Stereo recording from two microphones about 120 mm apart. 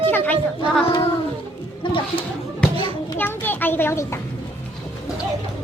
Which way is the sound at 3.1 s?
15° left (ahead or behind).